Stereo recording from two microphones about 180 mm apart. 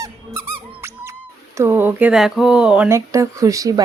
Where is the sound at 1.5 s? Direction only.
15° right (ahead or behind).